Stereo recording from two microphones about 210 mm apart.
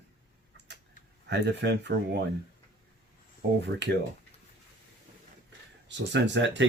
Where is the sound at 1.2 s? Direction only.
55° right (ahead or behind).